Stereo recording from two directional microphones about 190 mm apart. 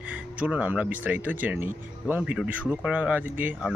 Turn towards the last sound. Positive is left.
turn(degrees=-10)  # may be behind; listen again after turning